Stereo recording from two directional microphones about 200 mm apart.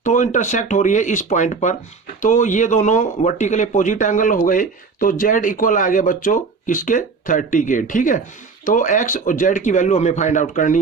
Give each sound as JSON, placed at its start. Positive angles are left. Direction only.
{"t": 0.0, "sound": "speech", "side_deg": 40}